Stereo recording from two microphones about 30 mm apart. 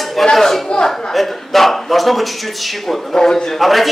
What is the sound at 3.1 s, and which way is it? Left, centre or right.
Speech, left.